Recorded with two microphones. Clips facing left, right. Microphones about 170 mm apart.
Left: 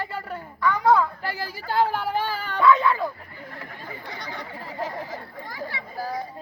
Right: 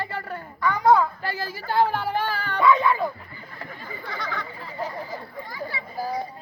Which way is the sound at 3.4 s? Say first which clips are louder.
Left 1 dB; 75° left (ahead or behind).